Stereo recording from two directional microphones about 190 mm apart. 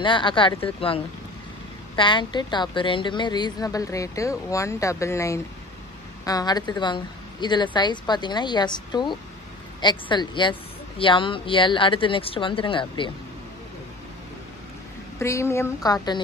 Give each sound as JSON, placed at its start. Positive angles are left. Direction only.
{"t": 0.0, "sound": "a woman's voice", "side_deg": 25}
{"t": 15.1, "sound": "a woman's voice", "side_deg": 15}